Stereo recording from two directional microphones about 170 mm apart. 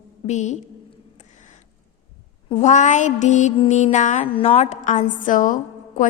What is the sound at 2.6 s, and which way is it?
A woman's voice, 45° left (ahead or behind).